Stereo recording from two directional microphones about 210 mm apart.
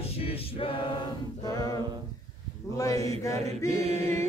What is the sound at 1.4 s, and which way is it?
A capella, 15° left (ahead or behind).